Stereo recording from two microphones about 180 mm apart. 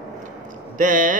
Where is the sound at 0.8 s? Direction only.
45° right (ahead or behind).